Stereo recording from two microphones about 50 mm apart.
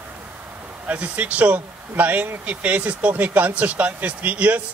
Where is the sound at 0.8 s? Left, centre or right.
Right.